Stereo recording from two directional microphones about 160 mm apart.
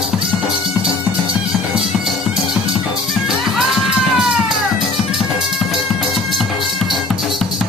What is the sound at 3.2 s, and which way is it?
Music, centre (ahead or behind).